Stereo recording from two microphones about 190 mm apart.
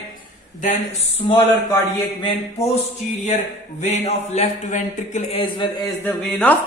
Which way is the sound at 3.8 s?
35° left (ahead or behind).